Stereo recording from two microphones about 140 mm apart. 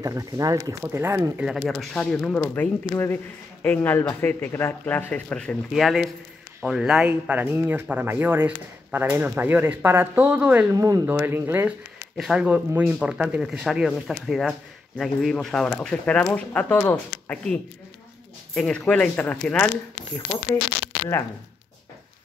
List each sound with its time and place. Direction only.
0.0 s speech: 25° right (ahead or behind)
1.4 s speech: centre (ahead or behind)
10.8 s speech: 25° right (ahead or behind); by 19.7 s 10° left (ahead or behind)